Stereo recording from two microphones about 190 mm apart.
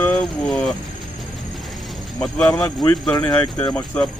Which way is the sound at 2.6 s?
20° left (ahead or behind).